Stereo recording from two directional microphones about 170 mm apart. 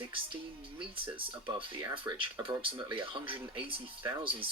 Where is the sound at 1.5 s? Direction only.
25° right (ahead or behind).